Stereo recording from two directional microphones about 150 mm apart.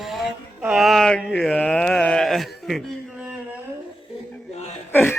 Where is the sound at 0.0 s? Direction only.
Centre (ahead or behind).